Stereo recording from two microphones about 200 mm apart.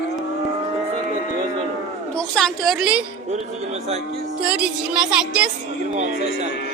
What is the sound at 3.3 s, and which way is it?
Speech, 35° right (ahead or behind).